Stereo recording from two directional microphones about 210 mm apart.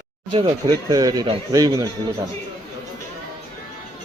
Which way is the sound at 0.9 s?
15° right (ahead or behind).